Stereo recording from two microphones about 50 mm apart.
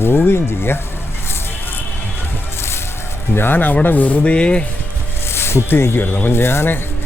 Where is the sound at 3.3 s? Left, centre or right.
Left.